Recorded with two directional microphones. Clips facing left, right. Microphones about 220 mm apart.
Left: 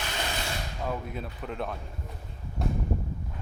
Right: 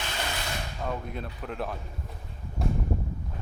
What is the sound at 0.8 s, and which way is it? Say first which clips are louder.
Speech: even; centre (ahead or behind).